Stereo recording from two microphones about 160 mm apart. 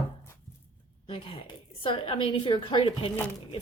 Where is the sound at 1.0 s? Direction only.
35° left (ahead or behind).